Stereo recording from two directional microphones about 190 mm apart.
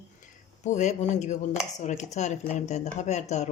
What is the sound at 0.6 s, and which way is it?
Dishes, 40° left (ahead or behind).